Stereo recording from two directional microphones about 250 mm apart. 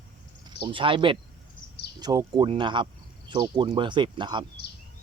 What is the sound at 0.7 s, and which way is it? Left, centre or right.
Speech, centre.